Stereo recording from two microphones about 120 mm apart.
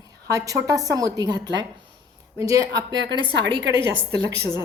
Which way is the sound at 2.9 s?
45° right (ahead or behind).